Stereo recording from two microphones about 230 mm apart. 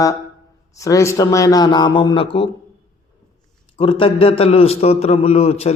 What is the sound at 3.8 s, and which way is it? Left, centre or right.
A man's voice, left.